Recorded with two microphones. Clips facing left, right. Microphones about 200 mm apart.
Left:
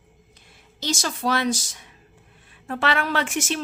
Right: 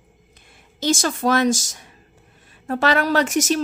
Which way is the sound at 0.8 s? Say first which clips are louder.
Right 6 dB; 50° right (ahead or behind).